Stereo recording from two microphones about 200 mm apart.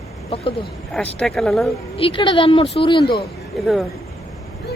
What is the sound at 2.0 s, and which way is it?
A woman's voice, 25° left (ahead or behind).